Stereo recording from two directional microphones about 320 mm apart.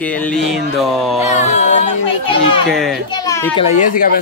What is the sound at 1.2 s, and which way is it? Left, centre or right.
A man's voice, left.